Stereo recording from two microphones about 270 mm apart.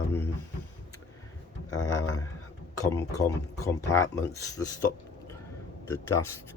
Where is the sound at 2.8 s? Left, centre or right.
Centre.